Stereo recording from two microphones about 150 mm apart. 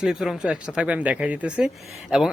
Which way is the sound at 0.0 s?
5° right (ahead or behind).